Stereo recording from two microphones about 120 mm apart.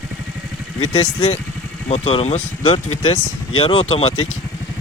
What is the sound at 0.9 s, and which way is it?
Speech, 50° left (ahead or behind).